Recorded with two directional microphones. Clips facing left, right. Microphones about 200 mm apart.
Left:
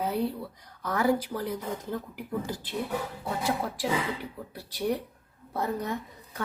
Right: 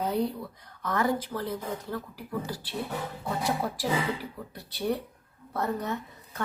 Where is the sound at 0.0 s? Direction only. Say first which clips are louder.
Right 1 dB; 5° left (ahead or behind).